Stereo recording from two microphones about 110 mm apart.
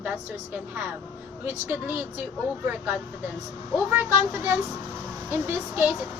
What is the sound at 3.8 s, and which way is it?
A woman's voice, 15° right (ahead or behind).